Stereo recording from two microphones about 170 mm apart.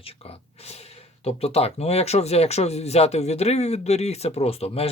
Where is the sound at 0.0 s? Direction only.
35° left (ahead or behind).